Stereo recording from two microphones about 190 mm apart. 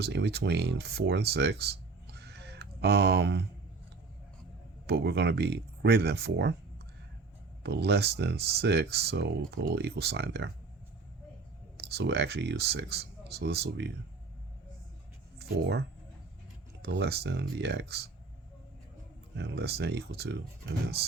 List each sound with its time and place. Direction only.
0.0 s speech: 60° right (ahead or behind)
4.9 s speech: 60° right (ahead or behind)
7.6 s speech: 60° right (ahead or behind)
11.9 s speech: 60° right (ahead or behind)
15.4 s speech: 60° right (ahead or behind)
16.8 s speech: 60° right (ahead or behind)
19.4 s speech: 60° right (ahead or behind)